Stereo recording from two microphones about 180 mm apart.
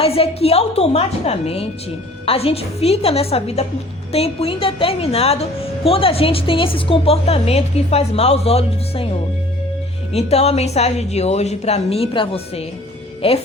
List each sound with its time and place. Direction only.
0.0 s a woman's voice: 35° left (ahead or behind)
10.1 s a woman's voice: 35° left (ahead or behind)